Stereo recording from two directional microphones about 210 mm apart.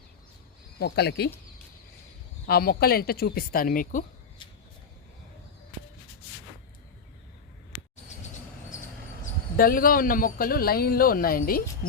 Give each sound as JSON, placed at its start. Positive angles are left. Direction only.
{"t": 0.8, "sound": "a man's voice", "side_deg": 50}
{"t": 2.5, "sound": "a man's voice", "side_deg": 45}
{"t": 9.6, "sound": "a man's voice", "side_deg": 45}